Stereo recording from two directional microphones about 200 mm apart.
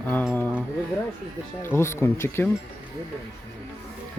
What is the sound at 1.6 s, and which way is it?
Speech, 15° left (ahead or behind).